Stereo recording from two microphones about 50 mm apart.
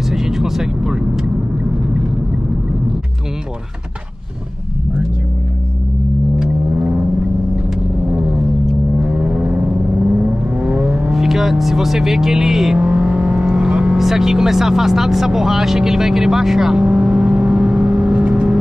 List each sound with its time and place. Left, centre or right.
0.1 s vehicle: centre
9.2 s vehicle: right
10.6 s vehicle: centre
11.1 s vehicle: centre
12.7 s vehicle: centre
16.8 s vehicle: right